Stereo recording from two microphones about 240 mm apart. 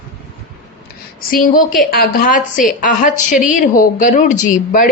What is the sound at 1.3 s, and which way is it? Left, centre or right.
Speech, left.